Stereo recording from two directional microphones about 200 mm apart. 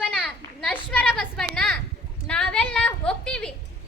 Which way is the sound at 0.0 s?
5° left (ahead or behind).